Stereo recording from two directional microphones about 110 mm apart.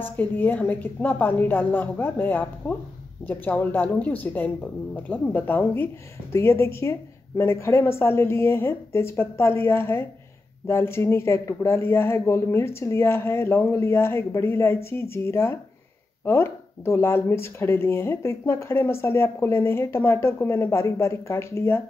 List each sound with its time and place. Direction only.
0.0 s a woman's voice: 15° left (ahead or behind)